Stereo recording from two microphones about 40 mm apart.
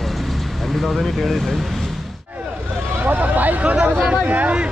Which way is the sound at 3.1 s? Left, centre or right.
Right.